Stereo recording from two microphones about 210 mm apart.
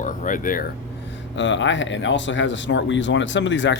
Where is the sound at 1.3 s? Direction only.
60° left (ahead or behind).